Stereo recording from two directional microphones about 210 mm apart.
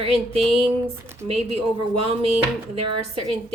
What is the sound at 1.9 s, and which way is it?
Speech, 25° right (ahead or behind).